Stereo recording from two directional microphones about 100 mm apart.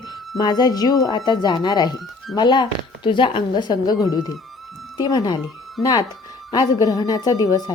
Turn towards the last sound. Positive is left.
turn(degrees=40)  # may be behind; listen again after turning